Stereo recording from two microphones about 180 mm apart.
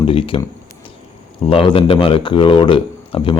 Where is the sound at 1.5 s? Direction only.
30° left (ahead or behind).